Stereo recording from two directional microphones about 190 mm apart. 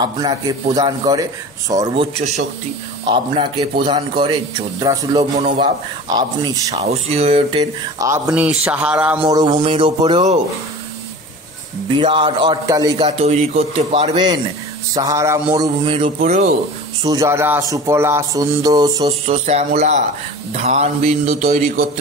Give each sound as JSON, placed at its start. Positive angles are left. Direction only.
{"t": 0.0, "sound": "a man's voice", "side_deg": -20}
{"t": 2.1, "sound": "speech", "side_deg": -35}
{"t": 3.1, "sound": "a man's voice", "side_deg": -25}
{"t": 6.7, "sound": "speech", "side_deg": -35}
{"t": 8.3, "sound": "a man's voice", "side_deg": -5}
{"t": 9.2, "sound": "a man's voice", "side_deg": -20}
{"t": 12.0, "sound": "a man's voice", "side_deg": -25}
{"t": 13.2, "sound": "speech", "side_deg": -35}
{"t": 14.1, "sound": "a man's voice", "side_deg": -25}
{"t": 16.2, "sound": "speech", "side_deg": -40}
{"t": 17.0, "sound": "speech", "side_deg": -15}
{"t": 19.0, "sound": "speech", "side_deg": -35}
{"t": 21.5, "sound": "speech", "side_deg": -50}